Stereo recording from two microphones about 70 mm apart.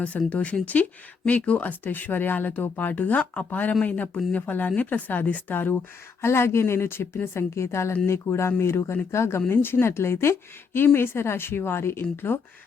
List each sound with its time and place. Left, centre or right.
0.3 s speech: centre
6.2 s speech: left